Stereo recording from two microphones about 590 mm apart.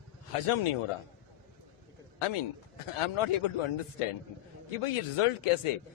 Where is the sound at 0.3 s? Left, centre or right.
Left.